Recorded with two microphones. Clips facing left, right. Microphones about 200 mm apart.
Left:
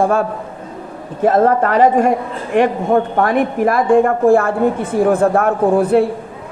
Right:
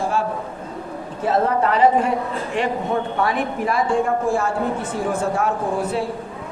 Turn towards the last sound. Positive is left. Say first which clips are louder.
# left 10 dB
turn(degrees=55)  # may be behind; listen again after turning